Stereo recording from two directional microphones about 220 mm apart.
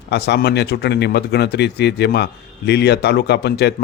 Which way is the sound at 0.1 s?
50° left (ahead or behind).